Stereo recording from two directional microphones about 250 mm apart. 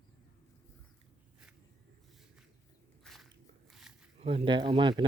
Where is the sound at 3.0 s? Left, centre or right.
Centre.